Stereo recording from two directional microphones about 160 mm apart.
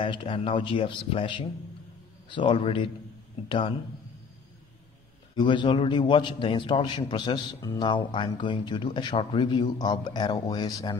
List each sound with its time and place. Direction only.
0.0 s speech: 30° left (ahead or behind)
5.3 s a man's voice: 30° left (ahead or behind)